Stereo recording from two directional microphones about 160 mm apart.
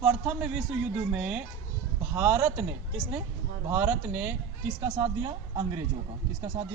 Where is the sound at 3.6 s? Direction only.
15° right (ahead or behind).